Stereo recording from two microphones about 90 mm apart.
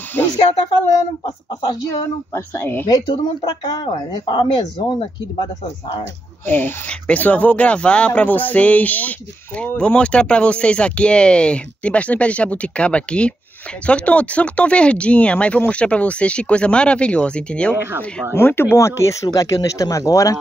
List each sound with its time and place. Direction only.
1.6 s speech: 50° left (ahead or behind)
2.3 s speech: 25° left (ahead or behind)
3.4 s speech: 50° left (ahead or behind)
6.4 s speech: 20° left (ahead or behind)
17.7 s speech: 25° right (ahead or behind)
18.3 s speech: 25° left (ahead or behind)